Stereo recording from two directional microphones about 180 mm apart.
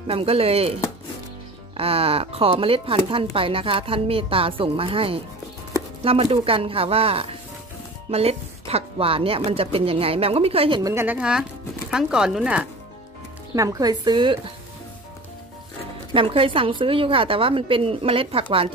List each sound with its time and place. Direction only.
0.0 s speech: 30° right (ahead or behind)
1.8 s speech: 30° right (ahead or behind)
10.8 s a woman's voice: 15° right (ahead or behind)
13.6 s a woman's voice: 20° right (ahead or behind)
16.1 s a woman's voice: 30° right (ahead or behind)